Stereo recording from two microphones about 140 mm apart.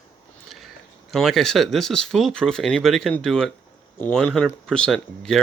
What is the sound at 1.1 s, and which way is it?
Speech, centre (ahead or behind).